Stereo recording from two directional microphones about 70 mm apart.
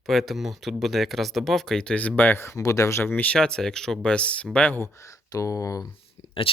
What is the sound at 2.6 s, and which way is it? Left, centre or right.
Speech, left.